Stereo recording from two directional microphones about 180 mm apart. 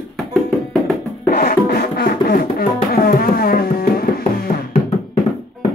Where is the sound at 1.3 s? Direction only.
55° left (ahead or behind).